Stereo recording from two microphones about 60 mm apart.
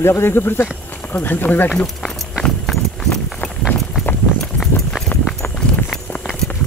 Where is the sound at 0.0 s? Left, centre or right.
Left.